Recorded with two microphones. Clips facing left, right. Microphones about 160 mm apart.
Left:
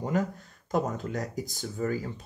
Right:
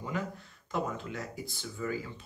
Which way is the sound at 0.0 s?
45° left (ahead or behind).